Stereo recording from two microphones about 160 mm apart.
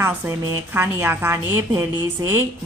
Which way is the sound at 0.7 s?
15° right (ahead or behind).